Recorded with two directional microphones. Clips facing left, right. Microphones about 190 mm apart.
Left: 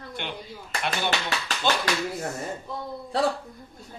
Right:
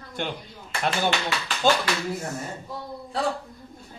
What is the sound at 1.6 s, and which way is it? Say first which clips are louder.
Speech: right 4 dB; 45° right (ahead or behind).